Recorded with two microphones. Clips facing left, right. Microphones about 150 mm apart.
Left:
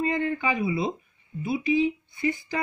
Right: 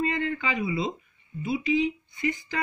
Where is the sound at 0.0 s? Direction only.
20° left (ahead or behind).